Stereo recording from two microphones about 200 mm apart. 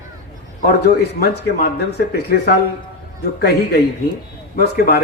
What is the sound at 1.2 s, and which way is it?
Speech, 50° left (ahead or behind).